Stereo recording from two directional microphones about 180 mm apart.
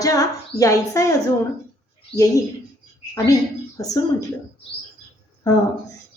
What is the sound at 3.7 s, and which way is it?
Speech, 20° left (ahead or behind).